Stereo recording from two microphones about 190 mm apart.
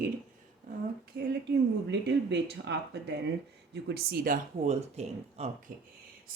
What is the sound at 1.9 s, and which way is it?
Speech, 65° right (ahead or behind).